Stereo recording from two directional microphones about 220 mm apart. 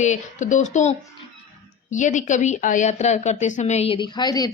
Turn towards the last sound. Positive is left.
turn(degrees=20)  # may be behind; listen again after turning